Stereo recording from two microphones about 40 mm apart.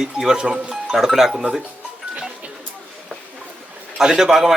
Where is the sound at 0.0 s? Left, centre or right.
Centre.